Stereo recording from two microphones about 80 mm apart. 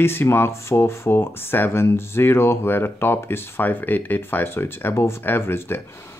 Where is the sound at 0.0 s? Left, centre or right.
Left.